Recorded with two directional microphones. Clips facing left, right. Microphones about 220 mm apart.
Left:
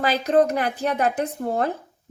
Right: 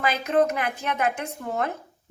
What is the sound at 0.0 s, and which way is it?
A woman's voice, 35° left (ahead or behind).